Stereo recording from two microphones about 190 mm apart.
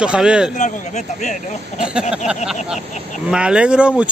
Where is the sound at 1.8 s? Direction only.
5° right (ahead or behind).